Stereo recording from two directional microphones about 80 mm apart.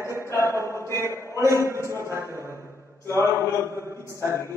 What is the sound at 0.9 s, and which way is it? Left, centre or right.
A man's voice, right.